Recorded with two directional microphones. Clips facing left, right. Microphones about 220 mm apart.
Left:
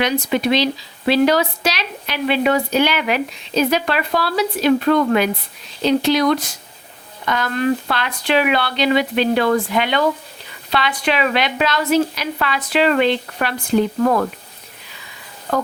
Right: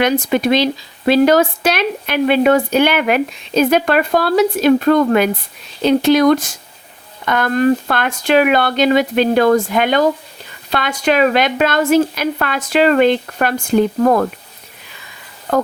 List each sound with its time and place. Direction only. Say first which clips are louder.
0.0 s speech: right 4 dB; 50° right (ahead or behind)